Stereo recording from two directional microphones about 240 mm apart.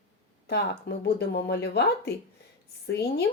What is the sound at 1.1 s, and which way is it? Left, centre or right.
Speech, left.